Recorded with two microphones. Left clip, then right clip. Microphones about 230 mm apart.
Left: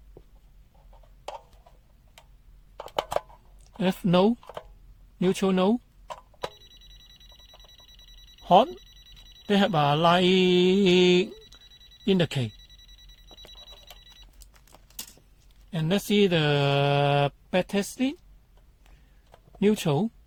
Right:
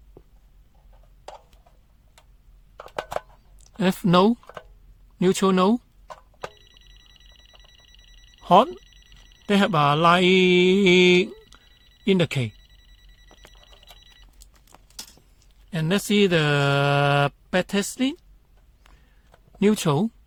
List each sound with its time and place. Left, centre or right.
3.8 s speech: right
8.4 s speech: right
13.2 s telephone bell ringing: centre
14.7 s a sound: right
15.7 s speech: right
19.5 s speech: right